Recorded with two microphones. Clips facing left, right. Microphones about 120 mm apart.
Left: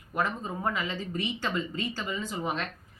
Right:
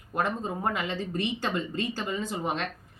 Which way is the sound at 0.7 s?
60° right (ahead or behind).